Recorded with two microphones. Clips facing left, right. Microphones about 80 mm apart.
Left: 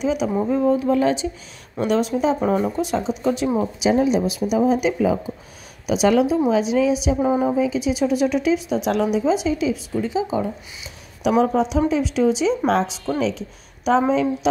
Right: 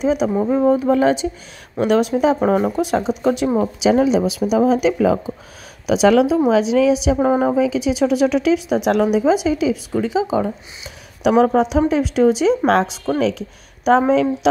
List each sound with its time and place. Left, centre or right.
0.0 s speech: right
3.8 s a woman's voice: right
7.2 s speech: right
7.5 s speech: right
11.2 s speech: right